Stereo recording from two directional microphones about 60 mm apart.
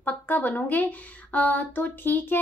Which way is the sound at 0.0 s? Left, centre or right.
Left.